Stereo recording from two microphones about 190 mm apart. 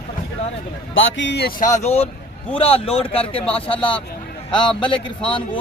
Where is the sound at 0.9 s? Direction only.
80° left; by 3.9 s 30° left (ahead or behind).